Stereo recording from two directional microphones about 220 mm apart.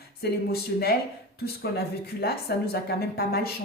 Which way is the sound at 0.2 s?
45° left (ahead or behind).